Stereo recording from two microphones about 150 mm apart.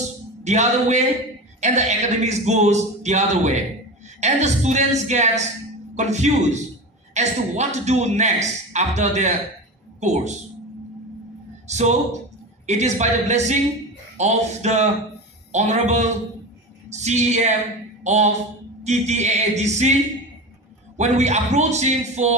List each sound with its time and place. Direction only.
0.4 s a man's voice: 50° right (ahead or behind)
11.7 s a man's voice: 50° right (ahead or behind)